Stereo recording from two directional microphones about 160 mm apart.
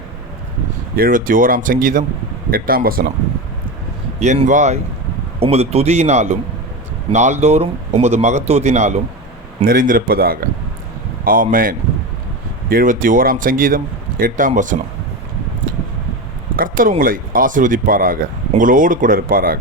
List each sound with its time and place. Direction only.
0.9 s speech: 60° right (ahead or behind)
4.2 s speech: 45° right (ahead or behind)
9.6 s speech: 60° right (ahead or behind)
11.5 s speech: 60° right (ahead or behind)
16.6 s a sound: 60° right (ahead or behind)
17.0 s speech: 60° right (ahead or behind)